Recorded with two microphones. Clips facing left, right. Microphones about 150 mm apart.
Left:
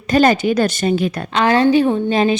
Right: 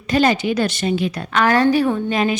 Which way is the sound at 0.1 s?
45° left (ahead or behind).